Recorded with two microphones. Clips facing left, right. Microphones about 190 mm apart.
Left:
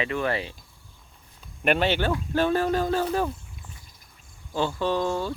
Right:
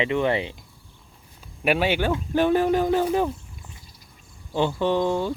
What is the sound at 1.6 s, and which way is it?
Speech, 5° right (ahead or behind).